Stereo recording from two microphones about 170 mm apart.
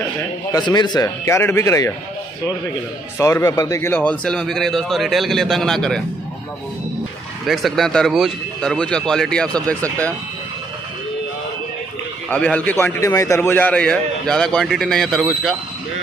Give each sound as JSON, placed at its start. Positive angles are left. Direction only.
{"t": 0.5, "sound": "a man's voice", "side_deg": 25}
{"t": 3.2, "sound": "a man's voice", "side_deg": 20}
{"t": 7.4, "sound": "a man's voice", "side_deg": 0}
{"t": 12.3, "sound": "a man's voice", "side_deg": 5}